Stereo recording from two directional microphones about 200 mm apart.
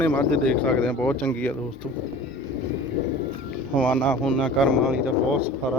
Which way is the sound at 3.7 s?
5° left (ahead or behind).